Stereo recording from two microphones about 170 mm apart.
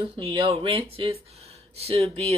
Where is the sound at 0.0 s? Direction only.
30° right (ahead or behind).